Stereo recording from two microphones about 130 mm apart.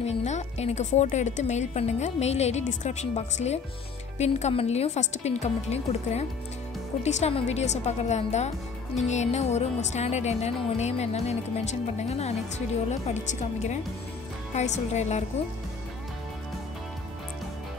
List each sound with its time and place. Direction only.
0.0 s speech: 60° left (ahead or behind)